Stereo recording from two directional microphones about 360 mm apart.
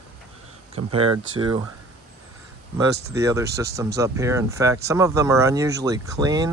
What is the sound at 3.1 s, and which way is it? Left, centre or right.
Speech, centre.